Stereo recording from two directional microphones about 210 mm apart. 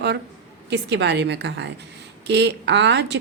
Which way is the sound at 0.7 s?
55° right (ahead or behind).